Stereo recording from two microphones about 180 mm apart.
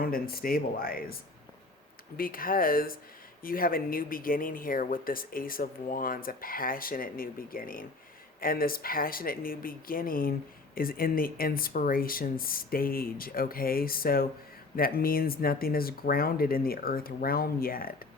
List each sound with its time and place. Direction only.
0.0 s speech: 55° left (ahead or behind)
2.1 s speech: 55° left (ahead or behind)